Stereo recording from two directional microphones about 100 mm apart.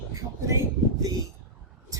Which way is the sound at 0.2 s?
30° right (ahead or behind).